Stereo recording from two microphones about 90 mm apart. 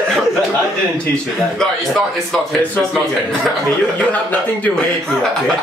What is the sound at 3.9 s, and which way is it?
Speech, 15° left (ahead or behind).